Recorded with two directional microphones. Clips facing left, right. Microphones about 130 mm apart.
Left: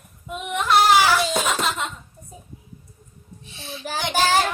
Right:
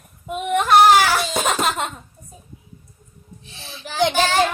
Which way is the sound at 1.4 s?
50° right (ahead or behind).